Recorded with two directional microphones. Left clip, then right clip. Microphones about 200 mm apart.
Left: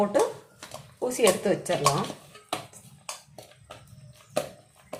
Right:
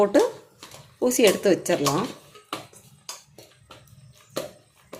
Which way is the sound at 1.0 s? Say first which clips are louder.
Right 4 dB; 50° right (ahead or behind).